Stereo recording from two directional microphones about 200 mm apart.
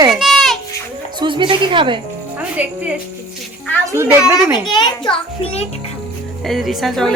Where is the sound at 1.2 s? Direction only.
25° right (ahead or behind).